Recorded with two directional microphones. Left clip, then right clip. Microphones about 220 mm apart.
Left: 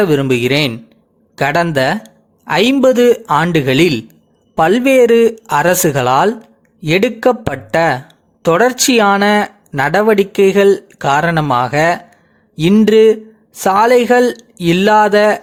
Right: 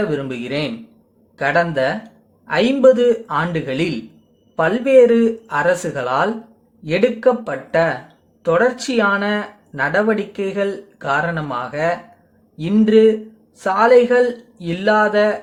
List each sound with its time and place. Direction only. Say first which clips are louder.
0.0 s speech: left 10 dB; 45° left (ahead or behind)